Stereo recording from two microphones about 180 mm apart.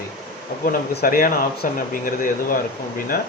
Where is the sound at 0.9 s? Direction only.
55° left (ahead or behind).